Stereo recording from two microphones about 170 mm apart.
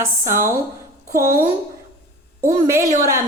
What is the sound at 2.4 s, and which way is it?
Speech, 15° right (ahead or behind).